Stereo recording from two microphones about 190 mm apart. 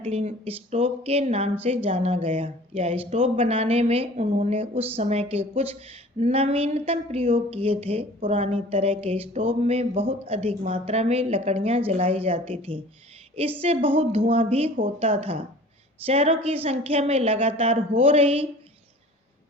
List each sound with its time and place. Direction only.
0.0 s speech: 35° right (ahead or behind)